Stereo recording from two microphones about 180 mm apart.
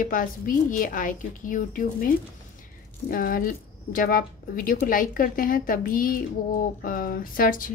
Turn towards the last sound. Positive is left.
turn(degrees=50)  # may be behind; listen again after turning